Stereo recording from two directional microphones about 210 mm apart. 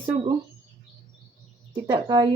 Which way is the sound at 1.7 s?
20° right (ahead or behind).